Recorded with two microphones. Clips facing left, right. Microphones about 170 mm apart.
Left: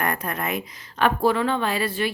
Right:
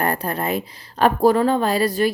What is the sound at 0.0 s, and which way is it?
A woman's voice, 35° right (ahead or behind).